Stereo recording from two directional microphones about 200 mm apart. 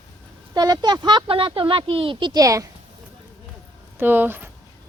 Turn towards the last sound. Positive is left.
turn(degrees=-10)  # may be behind; listen again after turning